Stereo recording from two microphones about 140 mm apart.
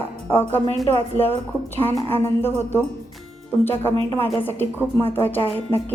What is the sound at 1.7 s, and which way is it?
A woman's voice, 15° left (ahead or behind).